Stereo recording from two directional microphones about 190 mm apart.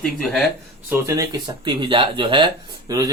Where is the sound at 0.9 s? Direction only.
15° right (ahead or behind).